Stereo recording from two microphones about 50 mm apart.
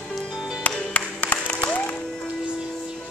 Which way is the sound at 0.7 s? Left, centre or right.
Left.